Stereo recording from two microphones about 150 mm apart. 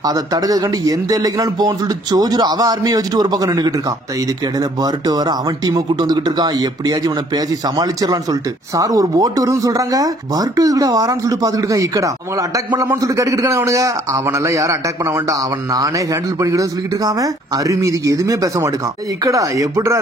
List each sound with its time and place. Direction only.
0.0 s speech: 25° right (ahead or behind)
5.0 s speech: 25° right (ahead or behind)